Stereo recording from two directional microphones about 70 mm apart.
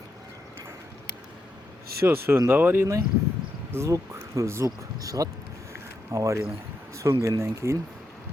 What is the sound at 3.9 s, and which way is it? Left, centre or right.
Speech, right.